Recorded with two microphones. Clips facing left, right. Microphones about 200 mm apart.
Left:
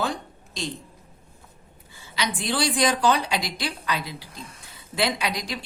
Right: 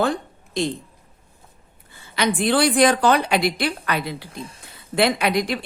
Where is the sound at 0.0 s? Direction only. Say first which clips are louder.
Right 6 dB; 55° right (ahead or behind).